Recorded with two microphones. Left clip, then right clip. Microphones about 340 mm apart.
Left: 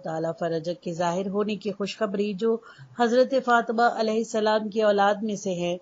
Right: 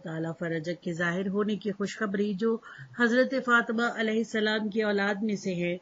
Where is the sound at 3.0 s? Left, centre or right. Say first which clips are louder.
Left 4 dB; centre.